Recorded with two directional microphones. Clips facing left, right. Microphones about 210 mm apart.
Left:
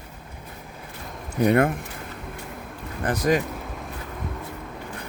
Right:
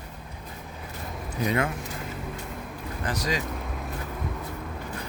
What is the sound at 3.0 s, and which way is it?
Speech, 55° left (ahead or behind).